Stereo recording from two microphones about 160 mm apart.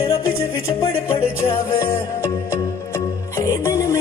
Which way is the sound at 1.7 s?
15° left (ahead or behind).